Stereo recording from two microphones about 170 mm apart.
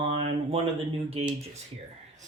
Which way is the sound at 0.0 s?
40° right (ahead or behind).